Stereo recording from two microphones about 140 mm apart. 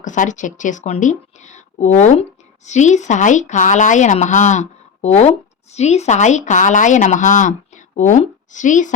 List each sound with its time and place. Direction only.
0.0 s speech: 65° left (ahead or behind)